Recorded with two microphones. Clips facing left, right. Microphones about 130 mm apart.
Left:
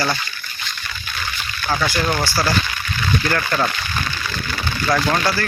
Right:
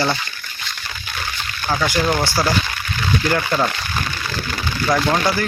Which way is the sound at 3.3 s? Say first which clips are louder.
Right 3 dB; 10° right (ahead or behind).